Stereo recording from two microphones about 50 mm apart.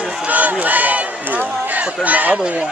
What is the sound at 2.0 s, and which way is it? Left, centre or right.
Speech, right.